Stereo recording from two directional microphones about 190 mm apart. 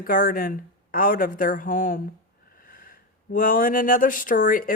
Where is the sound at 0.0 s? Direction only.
50° left (ahead or behind).